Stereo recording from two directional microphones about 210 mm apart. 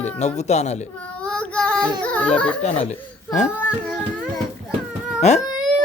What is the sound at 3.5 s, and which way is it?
Singing, 5° left (ahead or behind).